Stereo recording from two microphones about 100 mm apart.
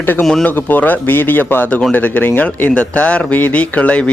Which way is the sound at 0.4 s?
15° left (ahead or behind).